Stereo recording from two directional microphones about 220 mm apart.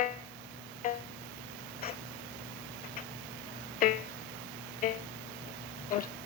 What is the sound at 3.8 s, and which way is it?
Music, 40° left (ahead or behind).